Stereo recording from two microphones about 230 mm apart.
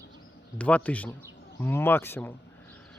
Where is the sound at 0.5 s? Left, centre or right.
Centre.